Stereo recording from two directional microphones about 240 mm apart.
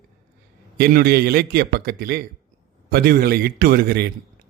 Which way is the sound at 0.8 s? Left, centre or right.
Right.